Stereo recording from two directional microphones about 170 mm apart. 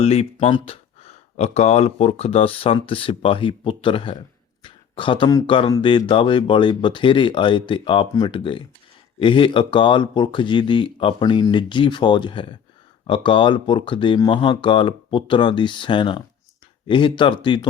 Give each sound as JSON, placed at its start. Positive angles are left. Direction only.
{"t": 0.0, "sound": "speech", "side_deg": 35}